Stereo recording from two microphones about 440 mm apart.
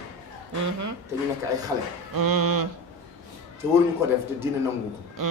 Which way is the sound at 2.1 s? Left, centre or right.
Right.